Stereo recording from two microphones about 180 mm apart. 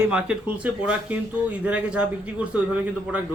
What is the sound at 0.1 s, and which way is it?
Speech, 5° right (ahead or behind).